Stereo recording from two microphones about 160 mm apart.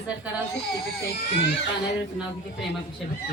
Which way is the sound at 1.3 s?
90° left.